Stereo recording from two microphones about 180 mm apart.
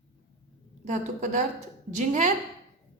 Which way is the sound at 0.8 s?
45° right (ahead or behind).